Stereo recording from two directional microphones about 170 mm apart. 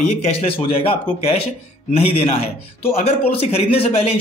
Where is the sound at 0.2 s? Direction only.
35° left (ahead or behind).